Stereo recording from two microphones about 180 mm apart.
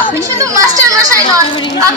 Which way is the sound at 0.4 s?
20° right (ahead or behind).